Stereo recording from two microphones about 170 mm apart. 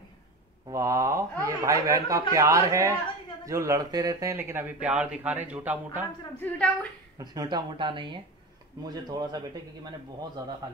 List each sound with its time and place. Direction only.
0.7 s speech: 20° right (ahead or behind)
6.4 s a woman's voice: 10° left (ahead or behind)
7.2 s speech: 25° right (ahead or behind)